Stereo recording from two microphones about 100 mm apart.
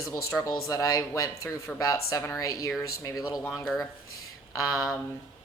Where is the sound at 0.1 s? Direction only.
30° left (ahead or behind).